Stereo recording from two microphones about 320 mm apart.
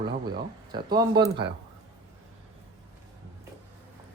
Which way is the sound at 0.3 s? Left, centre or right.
Centre.